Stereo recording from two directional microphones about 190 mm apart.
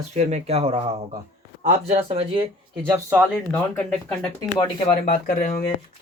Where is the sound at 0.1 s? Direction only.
35° right (ahead or behind).